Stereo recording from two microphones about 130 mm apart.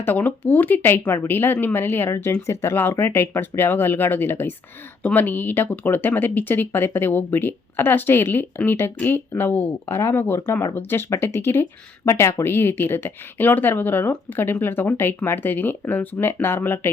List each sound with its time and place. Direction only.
0.0 s speech: 15° left (ahead or behind)